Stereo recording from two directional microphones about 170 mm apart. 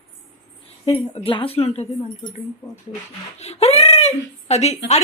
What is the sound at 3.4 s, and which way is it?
Speech, 35° left (ahead or behind).